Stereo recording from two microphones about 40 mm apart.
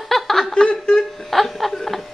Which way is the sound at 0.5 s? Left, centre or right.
Left.